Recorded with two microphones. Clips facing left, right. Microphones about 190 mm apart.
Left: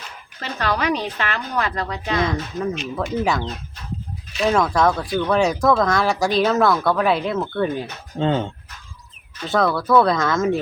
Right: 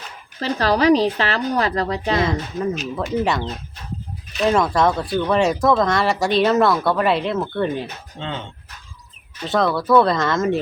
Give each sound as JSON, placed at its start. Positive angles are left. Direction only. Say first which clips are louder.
{"t": 0.3, "sound": "a woman's voice", "louder": "right 5 dB", "side_deg": -35}
{"t": 2.6, "sound": "speech", "louder": "right 1 dB", "side_deg": 0}
{"t": 8.2, "sound": "speech", "louder": "left 10 dB", "side_deg": 40}
{"t": 9.5, "sound": "speech", "louder": "right 1 dB", "side_deg": 0}